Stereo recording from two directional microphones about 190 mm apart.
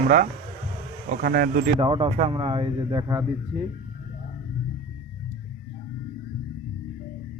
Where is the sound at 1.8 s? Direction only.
30° right (ahead or behind).